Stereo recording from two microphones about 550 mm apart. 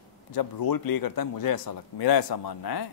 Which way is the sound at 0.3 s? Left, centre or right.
Left.